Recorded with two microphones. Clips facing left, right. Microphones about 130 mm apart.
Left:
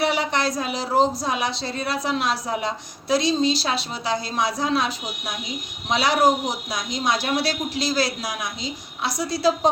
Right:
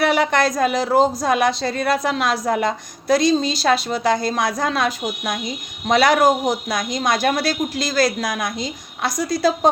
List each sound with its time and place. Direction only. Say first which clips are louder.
0.0 s a woman's voice: right 5 dB; 50° right (ahead or behind)